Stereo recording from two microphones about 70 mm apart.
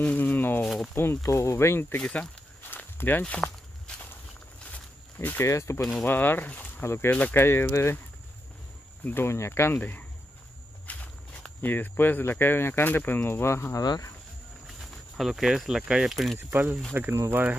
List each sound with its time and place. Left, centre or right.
0.0 s a sound: left
0.9 s speech: left
2.7 s walk: left
5.4 s speech: left
6.0 s speech: left
6.8 s speech: left
7.1 s speech: left
7.3 s speech: left
9.0 s speech: left
10.9 s walk: left
11.6 s speech: left
13.7 s speech: left
14.8 s speech: centre
16.3 s speech: right